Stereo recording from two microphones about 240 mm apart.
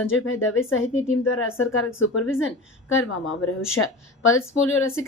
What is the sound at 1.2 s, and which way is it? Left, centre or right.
A woman's voice, left.